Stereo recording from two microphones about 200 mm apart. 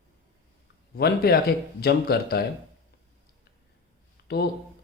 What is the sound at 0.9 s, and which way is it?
Speech, 50° left (ahead or behind).